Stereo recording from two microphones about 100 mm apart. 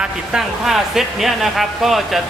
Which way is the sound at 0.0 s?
5° right (ahead or behind).